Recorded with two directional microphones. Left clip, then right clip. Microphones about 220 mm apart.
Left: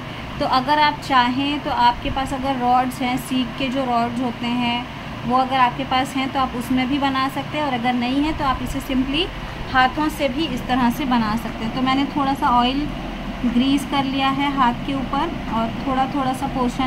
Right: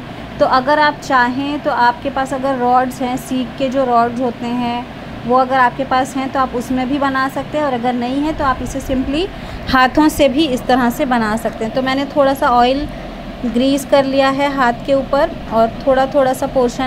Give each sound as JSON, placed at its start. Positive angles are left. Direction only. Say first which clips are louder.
{"t": 0.4, "sound": "a woman's voice", "louder": "right 5 dB", "side_deg": -15}
{"t": 9.7, "sound": "a woman's voice", "louder": "right 6 dB", "side_deg": -40}